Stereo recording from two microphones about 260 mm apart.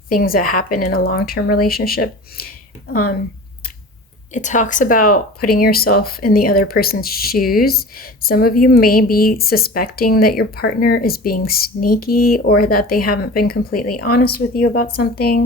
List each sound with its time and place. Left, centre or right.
0.1 s speech: left
4.4 s speech: left